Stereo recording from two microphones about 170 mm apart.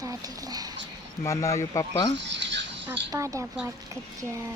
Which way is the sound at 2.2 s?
90° right.